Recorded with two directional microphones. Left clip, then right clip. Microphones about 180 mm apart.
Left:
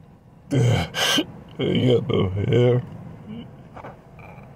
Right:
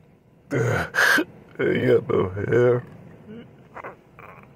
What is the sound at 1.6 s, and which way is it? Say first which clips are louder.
Speech: right 1 dB; 20° right (ahead or behind).